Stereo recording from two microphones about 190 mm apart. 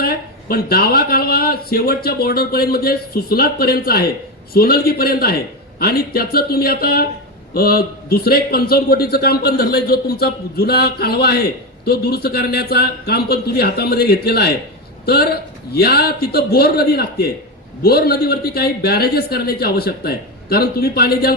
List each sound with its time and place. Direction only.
0.0 s a man's voice: 55° left (ahead or behind)